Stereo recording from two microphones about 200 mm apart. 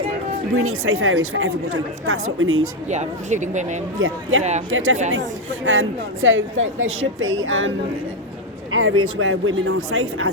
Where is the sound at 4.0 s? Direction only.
90° right.